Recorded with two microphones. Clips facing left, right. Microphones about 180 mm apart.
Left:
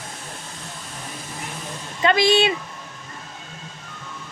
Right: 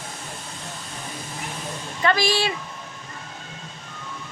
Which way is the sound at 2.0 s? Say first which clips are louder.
Left 4 dB; 20° left (ahead or behind).